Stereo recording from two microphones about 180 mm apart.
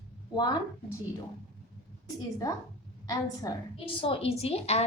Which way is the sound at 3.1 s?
20° left (ahead or behind).